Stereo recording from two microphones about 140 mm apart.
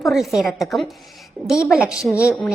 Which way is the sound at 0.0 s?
Centre (ahead or behind).